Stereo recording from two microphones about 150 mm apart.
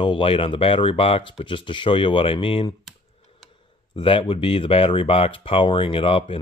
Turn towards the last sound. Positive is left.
turn(degrees=35)  # may be behind; listen again after turning